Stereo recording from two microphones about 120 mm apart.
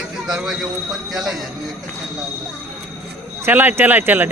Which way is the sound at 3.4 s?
15° right (ahead or behind).